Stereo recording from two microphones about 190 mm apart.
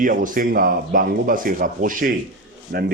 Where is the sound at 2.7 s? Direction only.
60° right (ahead or behind).